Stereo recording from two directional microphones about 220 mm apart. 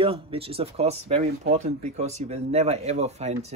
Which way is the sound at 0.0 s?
25° right (ahead or behind).